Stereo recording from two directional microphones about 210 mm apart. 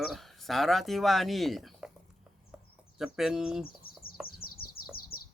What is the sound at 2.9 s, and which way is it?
Speech, centre (ahead or behind).